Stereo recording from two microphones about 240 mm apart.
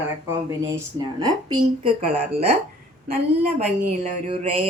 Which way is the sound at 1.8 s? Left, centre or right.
Right.